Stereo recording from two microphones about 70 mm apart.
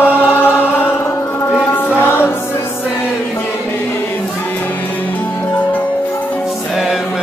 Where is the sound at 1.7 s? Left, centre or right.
Left.